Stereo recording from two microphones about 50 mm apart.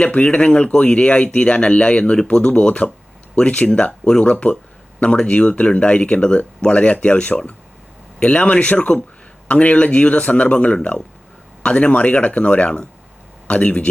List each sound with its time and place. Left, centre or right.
0.0 s speech: left